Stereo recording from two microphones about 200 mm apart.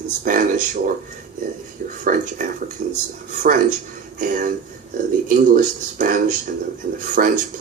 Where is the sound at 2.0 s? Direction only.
45° right (ahead or behind).